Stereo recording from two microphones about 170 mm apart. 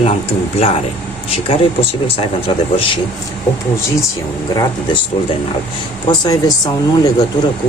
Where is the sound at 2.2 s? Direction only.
35° left (ahead or behind).